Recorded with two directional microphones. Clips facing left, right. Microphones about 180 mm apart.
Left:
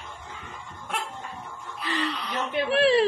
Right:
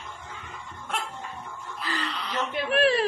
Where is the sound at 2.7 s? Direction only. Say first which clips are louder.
Left 2 dB; 25° left (ahead or behind).